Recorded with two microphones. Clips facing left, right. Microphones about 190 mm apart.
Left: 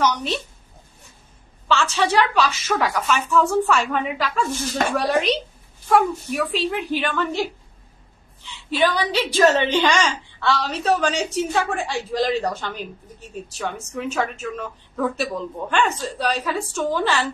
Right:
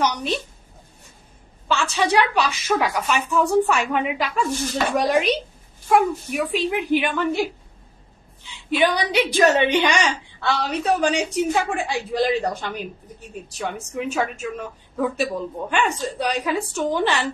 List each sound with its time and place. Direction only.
0.0 s speech: 10° right (ahead or behind)
1.8 s speech: 15° right (ahead or behind)
8.7 s speech: 15° right (ahead or behind)
13.9 s speech: 15° right (ahead or behind)